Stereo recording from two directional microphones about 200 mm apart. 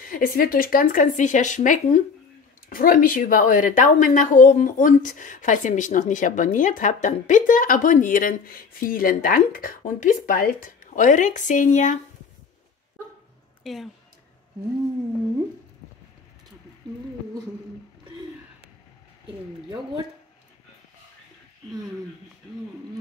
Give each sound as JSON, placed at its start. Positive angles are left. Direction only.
{"t": 0.0, "sound": "a woman's voice", "side_deg": 45}
{"t": 13.7, "sound": "speech", "side_deg": 0}